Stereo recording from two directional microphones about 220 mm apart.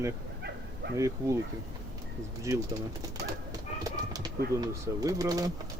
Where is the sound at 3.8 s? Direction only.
15° right (ahead or behind).